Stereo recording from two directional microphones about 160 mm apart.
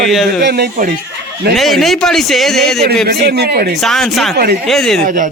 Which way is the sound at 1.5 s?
Centre (ahead or behind).